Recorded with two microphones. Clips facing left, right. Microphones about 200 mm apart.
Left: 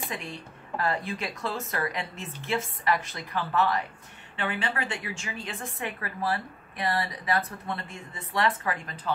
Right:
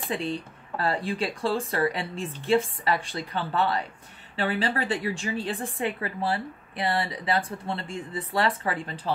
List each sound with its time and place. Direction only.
0.1 s a woman's voice: 30° right (ahead or behind)